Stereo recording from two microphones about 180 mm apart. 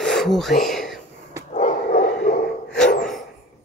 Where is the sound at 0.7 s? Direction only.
Centre (ahead or behind).